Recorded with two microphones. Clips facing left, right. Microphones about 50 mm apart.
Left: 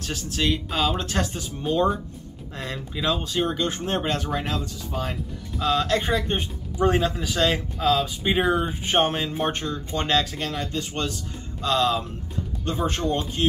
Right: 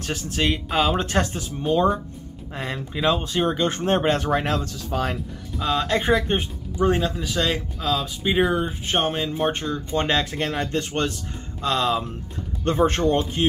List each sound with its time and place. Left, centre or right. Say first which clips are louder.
0.0 s speech: right 2 dB; right
1.3 s speech: right 3 dB; centre
2.6 s speech: right 4 dB; centre
3.6 s speech: right 5 dB; right
4.5 s speech: right 4 dB; right
5.6 s speech: even; centre
6.8 s speech: even; centre
9.9 s speech: right 1 dB; centre
10.2 s speech: right 4 dB; right
11.6 s speech: even; centre
12.6 s speech: right 6 dB; right